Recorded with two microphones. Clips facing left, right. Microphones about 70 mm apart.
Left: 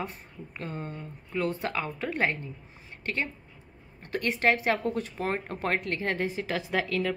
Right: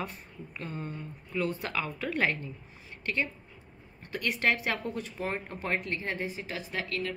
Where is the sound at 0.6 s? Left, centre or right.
Left.